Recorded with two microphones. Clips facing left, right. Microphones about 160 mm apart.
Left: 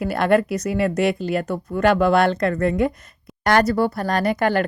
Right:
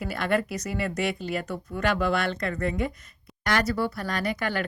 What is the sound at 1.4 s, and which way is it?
A woman's voice, 55° left (ahead or behind).